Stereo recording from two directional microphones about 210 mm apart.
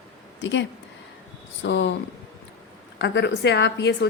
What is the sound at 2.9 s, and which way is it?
A woman's voice, 55° left (ahead or behind).